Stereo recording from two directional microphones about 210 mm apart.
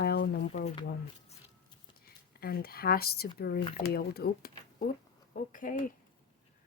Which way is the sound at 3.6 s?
25° left (ahead or behind).